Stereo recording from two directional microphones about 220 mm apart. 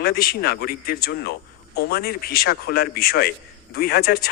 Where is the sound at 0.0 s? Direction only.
40° left (ahead or behind).